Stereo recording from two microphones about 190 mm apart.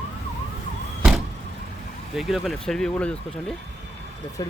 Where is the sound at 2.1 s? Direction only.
Centre (ahead or behind).